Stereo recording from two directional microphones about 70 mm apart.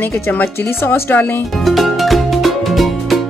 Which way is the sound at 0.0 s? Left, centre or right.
Left.